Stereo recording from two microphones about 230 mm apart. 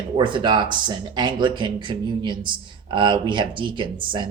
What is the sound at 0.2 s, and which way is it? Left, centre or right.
Speech, right.